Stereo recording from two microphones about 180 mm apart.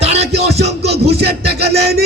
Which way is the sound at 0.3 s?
65° right (ahead or behind).